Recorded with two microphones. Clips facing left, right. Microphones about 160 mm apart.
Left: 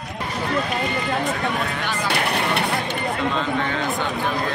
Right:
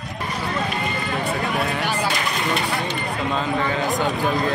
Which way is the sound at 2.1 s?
60° left (ahead or behind).